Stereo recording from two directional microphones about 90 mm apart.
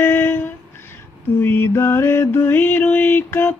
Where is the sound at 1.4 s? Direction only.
25° left (ahead or behind).